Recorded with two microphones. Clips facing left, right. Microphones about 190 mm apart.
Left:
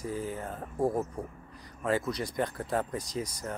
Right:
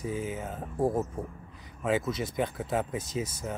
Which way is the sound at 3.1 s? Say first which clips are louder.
Right 3 dB; 25° right (ahead or behind).